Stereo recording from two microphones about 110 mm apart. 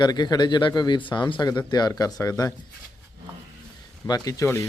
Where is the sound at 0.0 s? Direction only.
40° left (ahead or behind).